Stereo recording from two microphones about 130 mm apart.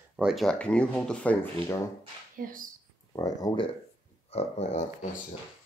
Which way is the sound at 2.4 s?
90° right.